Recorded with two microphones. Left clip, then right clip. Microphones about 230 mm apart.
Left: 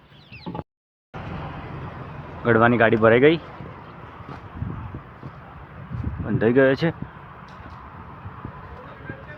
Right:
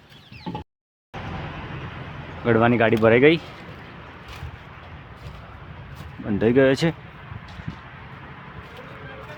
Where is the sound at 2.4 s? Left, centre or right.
Centre.